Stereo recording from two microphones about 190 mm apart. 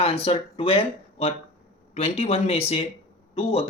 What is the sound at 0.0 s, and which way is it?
Speech, 30° left (ahead or behind).